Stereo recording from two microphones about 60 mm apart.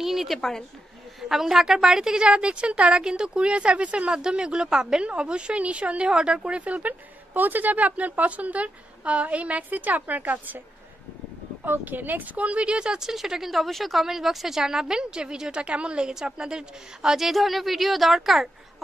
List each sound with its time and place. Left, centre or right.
0.0 s speech: centre
0.4 s speech: centre
1.3 s a woman's voice: centre; by 10.6 s right
11.6 s a woman's voice: right; by 13.1 s centre
13.1 s speech: centre